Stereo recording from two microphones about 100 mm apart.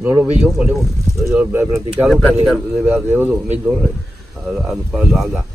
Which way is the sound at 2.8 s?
20° right (ahead or behind).